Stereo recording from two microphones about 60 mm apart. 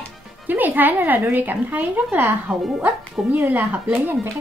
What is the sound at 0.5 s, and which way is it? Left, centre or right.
Speech, right.